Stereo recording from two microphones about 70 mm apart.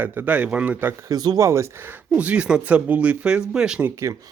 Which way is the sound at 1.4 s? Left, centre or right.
Right.